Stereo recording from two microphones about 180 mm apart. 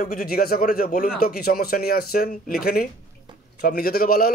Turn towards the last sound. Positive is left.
turn(degrees=55)  # may be behind; listen again after turning